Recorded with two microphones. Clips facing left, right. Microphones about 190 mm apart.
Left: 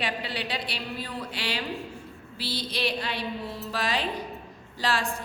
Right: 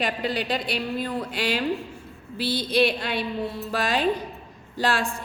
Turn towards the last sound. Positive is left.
turn(degrees=-50)  # may be behind; listen again after turning